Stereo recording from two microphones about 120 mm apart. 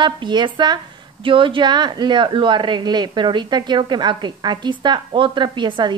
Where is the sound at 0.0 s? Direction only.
40° right (ahead or behind).